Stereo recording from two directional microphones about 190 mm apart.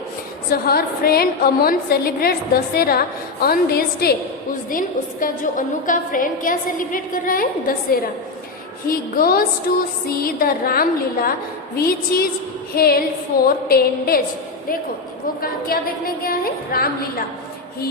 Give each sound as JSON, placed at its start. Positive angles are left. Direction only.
{"t": 0.5, "sound": "a woman's voice", "side_deg": 50}
{"t": 8.9, "sound": "a woman's voice", "side_deg": 50}
{"t": 15.4, "sound": "a woman's voice", "side_deg": 50}